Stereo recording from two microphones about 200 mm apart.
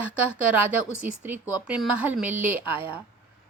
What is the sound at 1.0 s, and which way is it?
A woman's voice, 5° right (ahead or behind).